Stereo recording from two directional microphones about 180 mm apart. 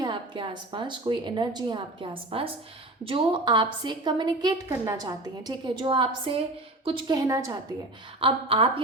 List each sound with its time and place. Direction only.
0.0 s a woman's voice: 25° right (ahead or behind)
8.2 s a woman's voice: 30° right (ahead or behind)